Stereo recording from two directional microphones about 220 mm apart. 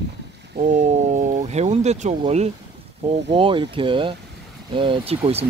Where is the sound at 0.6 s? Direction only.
30° right (ahead or behind).